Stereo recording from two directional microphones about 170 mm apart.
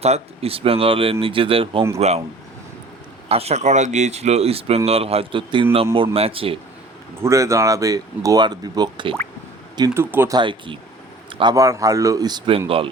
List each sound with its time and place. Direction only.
0.0 s speech: 35° right (ahead or behind)
3.2 s speech: 35° right (ahead or behind)
7.2 s speech: 15° right (ahead or behind)
10.3 s speech: 30° right (ahead or behind)